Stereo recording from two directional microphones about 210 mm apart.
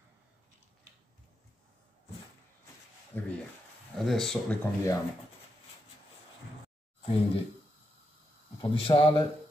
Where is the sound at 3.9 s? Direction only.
Centre (ahead or behind).